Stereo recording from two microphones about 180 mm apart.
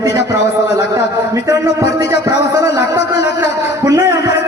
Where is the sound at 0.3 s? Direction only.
20° right (ahead or behind).